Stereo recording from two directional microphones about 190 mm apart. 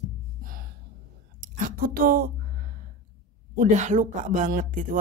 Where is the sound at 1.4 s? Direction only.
45° right (ahead or behind).